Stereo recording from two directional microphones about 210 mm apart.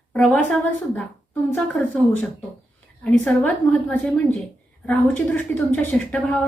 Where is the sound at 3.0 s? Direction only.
5° left (ahead or behind).